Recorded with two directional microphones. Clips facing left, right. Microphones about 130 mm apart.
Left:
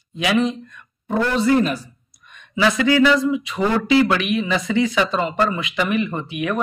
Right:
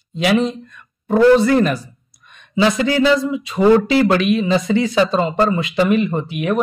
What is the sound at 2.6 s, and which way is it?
Speech, 30° right (ahead or behind).